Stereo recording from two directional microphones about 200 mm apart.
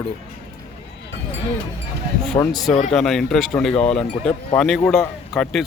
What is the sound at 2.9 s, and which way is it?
Speech, centre (ahead or behind).